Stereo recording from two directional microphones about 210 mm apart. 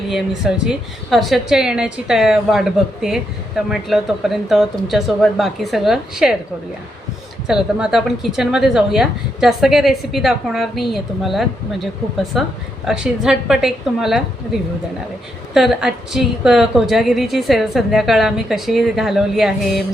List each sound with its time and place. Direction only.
0.1 s a woman's voice: centre (ahead or behind)
7.4 s a woman's voice: 5° right (ahead or behind)
15.5 s a woman's voice: centre (ahead or behind)